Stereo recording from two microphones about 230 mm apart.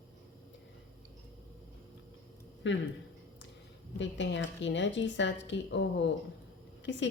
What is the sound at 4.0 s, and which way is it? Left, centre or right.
A woman's voice, left.